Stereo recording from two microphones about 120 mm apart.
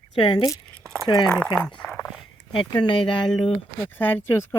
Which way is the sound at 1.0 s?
40° left (ahead or behind).